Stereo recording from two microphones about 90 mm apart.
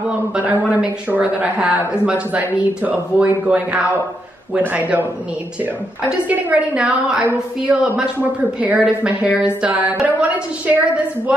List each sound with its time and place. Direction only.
0.4 s a woman's voice: 15° right (ahead or behind)
6.0 s a woman's voice: 15° right (ahead or behind)